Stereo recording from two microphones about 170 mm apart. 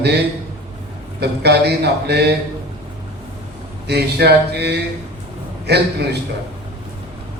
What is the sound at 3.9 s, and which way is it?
A man's voice, 75° right (ahead or behind).